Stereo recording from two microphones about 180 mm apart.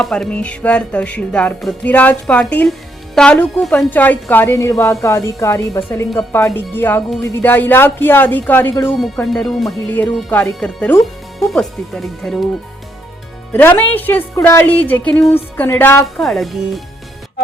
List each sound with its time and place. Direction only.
0.0 s music: 5° left (ahead or behind)
11.3 s speech: centre (ahead or behind)
13.5 s music: 10° left (ahead or behind)
16.2 s speech: centre (ahead or behind)